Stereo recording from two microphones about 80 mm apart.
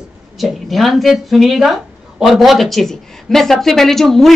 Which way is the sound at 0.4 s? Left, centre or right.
Centre.